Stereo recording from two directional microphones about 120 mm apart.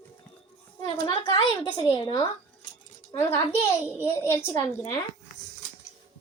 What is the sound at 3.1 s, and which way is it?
Speech, 25° left (ahead or behind).